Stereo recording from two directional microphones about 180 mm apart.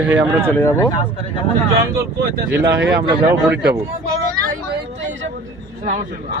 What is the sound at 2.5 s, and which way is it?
Speech, 10° right (ahead or behind).